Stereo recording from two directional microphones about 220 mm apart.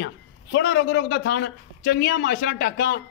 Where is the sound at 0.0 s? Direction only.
50° left (ahead or behind).